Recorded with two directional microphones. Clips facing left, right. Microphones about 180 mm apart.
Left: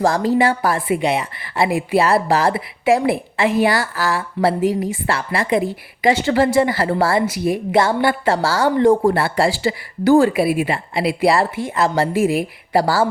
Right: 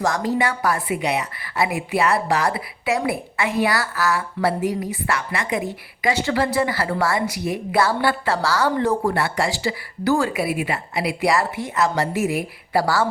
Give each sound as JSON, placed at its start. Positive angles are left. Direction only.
{"t": 0.0, "sound": "a woman's voice", "side_deg": 30}